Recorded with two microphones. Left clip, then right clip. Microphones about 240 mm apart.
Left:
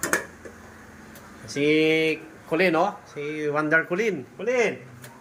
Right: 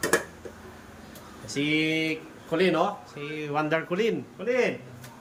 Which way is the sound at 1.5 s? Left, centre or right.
Centre.